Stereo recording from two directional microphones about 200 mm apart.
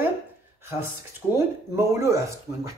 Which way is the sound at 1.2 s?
5° left (ahead or behind).